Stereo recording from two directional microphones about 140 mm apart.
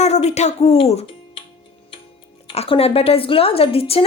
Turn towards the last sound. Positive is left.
turn(degrees=45)  # may be behind; listen again after turning